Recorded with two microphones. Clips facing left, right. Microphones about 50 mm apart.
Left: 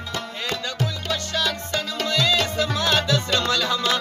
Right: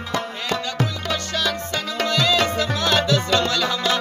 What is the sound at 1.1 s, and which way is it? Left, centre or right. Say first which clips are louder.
Music: right 2 dB; centre.